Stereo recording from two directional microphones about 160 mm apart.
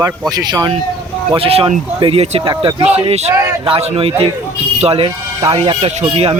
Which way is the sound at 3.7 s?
35° right (ahead or behind).